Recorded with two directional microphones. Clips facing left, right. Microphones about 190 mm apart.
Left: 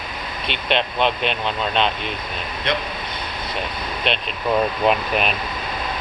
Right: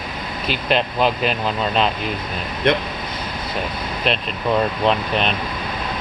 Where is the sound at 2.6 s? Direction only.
55° right (ahead or behind).